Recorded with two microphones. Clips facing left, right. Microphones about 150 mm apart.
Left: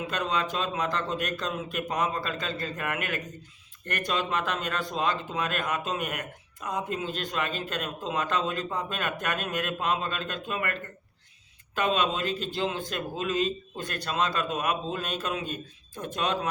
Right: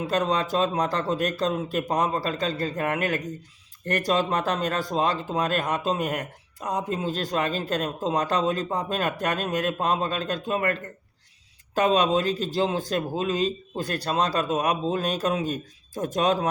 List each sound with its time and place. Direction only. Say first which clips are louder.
0.1 s speech: right 7 dB; 40° right (ahead or behind)